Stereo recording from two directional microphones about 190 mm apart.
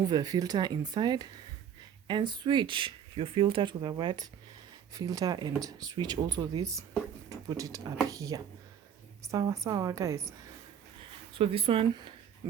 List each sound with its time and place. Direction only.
0.1 s speech: 20° right (ahead or behind)
7.3 s a sound: 20° right (ahead or behind)
8.1 s a woman's voice: 15° right (ahead or behind)
11.3 s speech: 30° right (ahead or behind)